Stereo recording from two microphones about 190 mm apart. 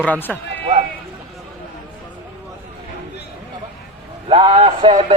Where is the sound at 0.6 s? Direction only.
35° right (ahead or behind).